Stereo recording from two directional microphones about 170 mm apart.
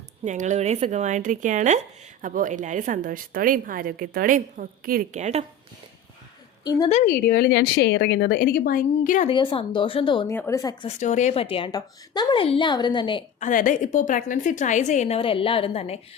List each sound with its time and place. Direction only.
0.3 s a woman's voice: 45° right (ahead or behind)
5.2 s speech: 40° right (ahead or behind)
7.0 s a woman's voice: 60° left (ahead or behind)
9.3 s a woman's voice: 30° left (ahead or behind)
10.2 s speech: 15° left (ahead or behind)
10.8 s a woman's voice: 45° left (ahead or behind); by 13.2 s 30° left (ahead or behind)
13.4 s a woman's voice: 50° left (ahead or behind)